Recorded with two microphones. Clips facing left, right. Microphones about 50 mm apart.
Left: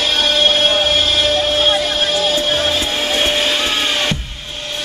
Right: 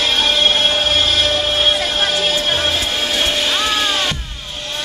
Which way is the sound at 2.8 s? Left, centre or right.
Centre.